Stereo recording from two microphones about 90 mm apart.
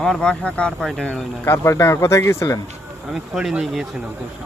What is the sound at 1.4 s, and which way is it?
Speech, 30° left (ahead or behind).